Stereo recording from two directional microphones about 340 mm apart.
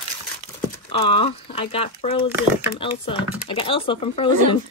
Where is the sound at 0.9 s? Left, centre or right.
Centre.